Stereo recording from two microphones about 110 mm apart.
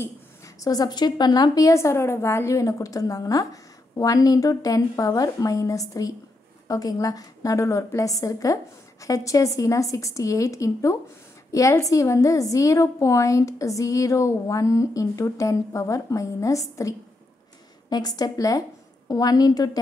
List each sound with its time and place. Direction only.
0.6 s a woman's voice: 35° left (ahead or behind)